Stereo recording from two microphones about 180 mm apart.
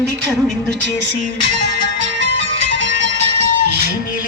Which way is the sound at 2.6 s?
75° right (ahead or behind).